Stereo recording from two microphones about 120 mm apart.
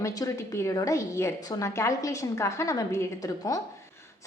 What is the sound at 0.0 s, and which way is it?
A woman's voice, 25° left (ahead or behind).